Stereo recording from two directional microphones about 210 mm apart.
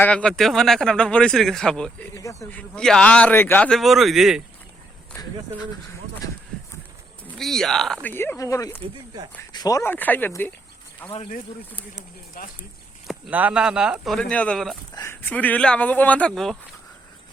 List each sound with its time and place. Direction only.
0.0 s speech: 5° left (ahead or behind)
7.3 s speech: centre (ahead or behind)
8.8 s speech: 20° right (ahead or behind)
9.5 s speech: 20° left (ahead or behind)
12.4 s speech: 45° left (ahead or behind)
13.1 s speech: 5° right (ahead or behind)